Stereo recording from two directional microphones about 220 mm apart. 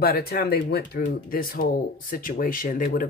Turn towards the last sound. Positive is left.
turn(degrees=40)  # may be behind; listen again after turning